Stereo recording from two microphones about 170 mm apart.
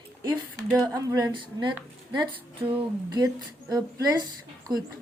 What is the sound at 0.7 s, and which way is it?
Speech, centre (ahead or behind).